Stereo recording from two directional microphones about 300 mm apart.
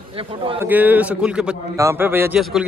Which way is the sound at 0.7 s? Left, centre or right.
Centre.